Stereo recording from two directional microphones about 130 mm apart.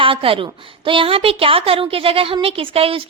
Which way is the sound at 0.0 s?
45° right (ahead or behind).